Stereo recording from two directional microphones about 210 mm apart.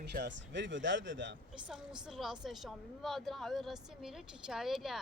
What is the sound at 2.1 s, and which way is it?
A woman's voice, centre (ahead or behind).